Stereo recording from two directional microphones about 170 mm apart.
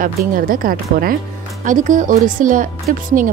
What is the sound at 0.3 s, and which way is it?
A woman's voice, 55° right (ahead or behind).